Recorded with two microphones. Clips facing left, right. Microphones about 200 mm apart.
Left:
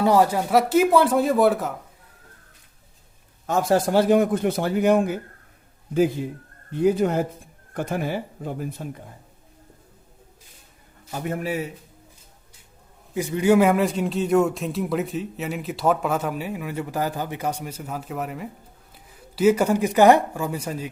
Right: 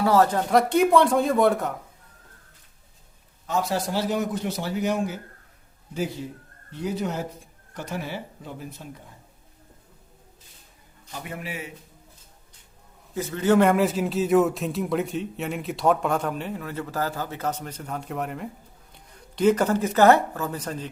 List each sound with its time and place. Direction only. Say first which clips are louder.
0.0 s a man's voice: left 1 dB; 15° left (ahead or behind)
3.4 s a man's voice: left 6 dB; 50° left (ahead or behind)
11.1 s speech: left 8 dB; 45° left (ahead or behind)
13.1 s a man's voice: left 2 dB; 15° left (ahead or behind)